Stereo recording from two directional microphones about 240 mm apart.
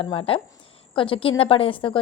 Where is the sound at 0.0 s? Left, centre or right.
Left.